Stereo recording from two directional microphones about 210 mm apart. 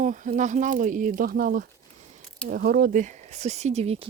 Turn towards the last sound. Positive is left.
turn(degrees=-30)  # may be behind; listen again after turning